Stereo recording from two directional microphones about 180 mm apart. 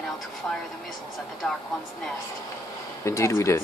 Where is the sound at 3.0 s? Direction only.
15° left (ahead or behind).